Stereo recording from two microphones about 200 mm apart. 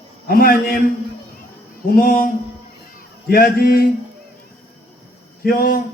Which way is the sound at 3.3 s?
45° left (ahead or behind).